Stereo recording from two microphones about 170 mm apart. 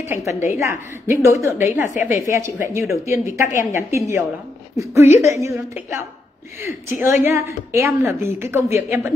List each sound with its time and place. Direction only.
0.0 s a woman's voice: 15° right (ahead or behind)
6.6 s a woman's voice: 15° right (ahead or behind)